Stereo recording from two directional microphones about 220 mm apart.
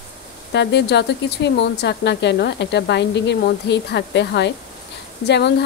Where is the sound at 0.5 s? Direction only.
50° left (ahead or behind).